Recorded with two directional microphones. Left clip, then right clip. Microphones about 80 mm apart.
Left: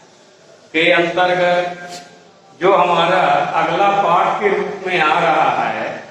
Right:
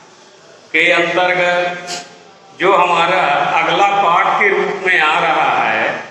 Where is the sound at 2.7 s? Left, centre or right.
Right.